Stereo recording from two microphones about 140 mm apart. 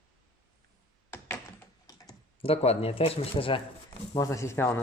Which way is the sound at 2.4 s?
45° left (ahead or behind).